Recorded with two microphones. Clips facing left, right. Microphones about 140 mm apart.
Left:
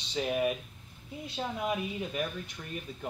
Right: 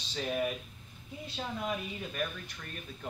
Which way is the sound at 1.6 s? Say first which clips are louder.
Left 5 dB; 15° left (ahead or behind).